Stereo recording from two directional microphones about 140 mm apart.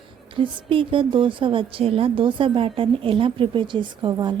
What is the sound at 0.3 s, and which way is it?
A woman's voice, 40° right (ahead or behind).